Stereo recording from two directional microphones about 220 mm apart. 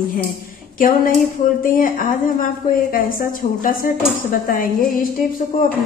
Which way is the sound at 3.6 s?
40° left (ahead or behind).